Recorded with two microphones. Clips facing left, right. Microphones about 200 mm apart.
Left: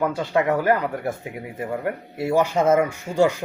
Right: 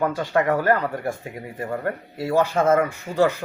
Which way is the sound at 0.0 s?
10° left (ahead or behind).